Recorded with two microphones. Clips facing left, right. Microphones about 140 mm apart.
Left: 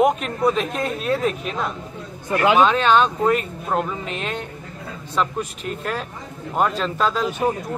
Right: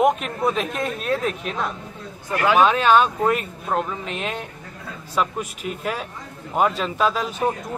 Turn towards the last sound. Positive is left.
turn(degrees=-5)  # may be behind; listen again after turning